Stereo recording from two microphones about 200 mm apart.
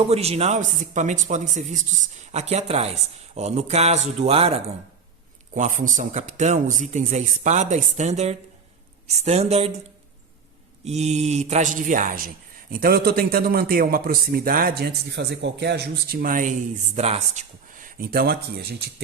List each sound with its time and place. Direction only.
0.0 s speech: 30° right (ahead or behind)
10.8 s a man's voice: 35° right (ahead or behind); by 18.3 s 50° right (ahead or behind)